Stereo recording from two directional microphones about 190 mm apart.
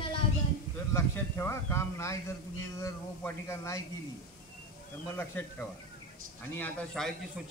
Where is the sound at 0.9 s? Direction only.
15° left (ahead or behind).